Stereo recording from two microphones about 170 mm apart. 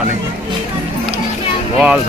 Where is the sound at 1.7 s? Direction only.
5° right (ahead or behind).